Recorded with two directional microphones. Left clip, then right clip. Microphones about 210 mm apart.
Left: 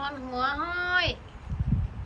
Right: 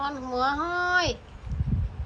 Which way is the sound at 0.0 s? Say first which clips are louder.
Right 3 dB; 20° right (ahead or behind).